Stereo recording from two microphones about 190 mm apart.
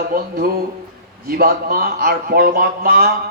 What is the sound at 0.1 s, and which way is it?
A man's voice, 50° right (ahead or behind).